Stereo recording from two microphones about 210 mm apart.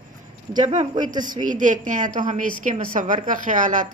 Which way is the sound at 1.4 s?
40° right (ahead or behind).